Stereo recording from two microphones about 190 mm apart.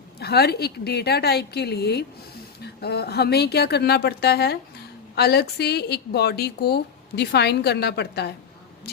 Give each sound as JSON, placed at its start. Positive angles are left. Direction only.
{"t": 0.2, "sound": "speech", "side_deg": 55}